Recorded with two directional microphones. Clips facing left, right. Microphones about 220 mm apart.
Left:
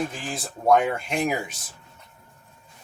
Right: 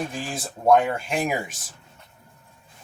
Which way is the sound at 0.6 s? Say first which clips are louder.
Right 1 dB; 5° right (ahead or behind).